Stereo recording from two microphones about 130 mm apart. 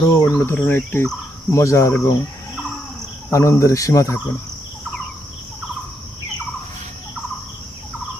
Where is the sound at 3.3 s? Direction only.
20° left (ahead or behind).